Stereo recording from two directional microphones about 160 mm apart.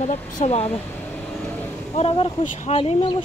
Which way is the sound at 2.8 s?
35° left (ahead or behind).